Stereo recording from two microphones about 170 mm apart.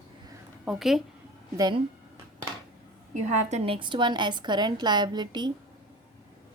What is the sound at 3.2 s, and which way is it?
Speech, 40° right (ahead or behind).